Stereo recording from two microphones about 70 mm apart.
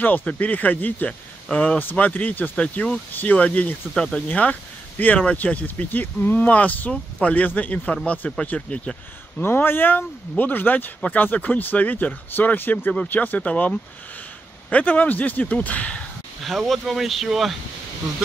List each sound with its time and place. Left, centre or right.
0.2 s speech: left
9.4 s speech: left
16.4 s speech: centre